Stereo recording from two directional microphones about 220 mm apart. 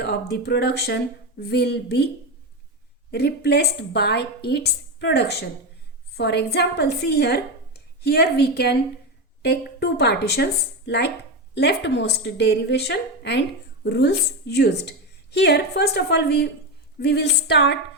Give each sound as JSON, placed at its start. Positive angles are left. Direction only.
{"t": 0.0, "sound": "a woman's voice", "side_deg": 50}
{"t": 3.1, "sound": "a woman's voice", "side_deg": 50}